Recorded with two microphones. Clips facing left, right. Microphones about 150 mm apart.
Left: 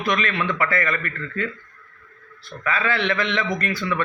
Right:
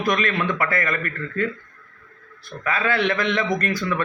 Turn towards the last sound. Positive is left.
turn(degrees=-40)  # may be behind; listen again after turning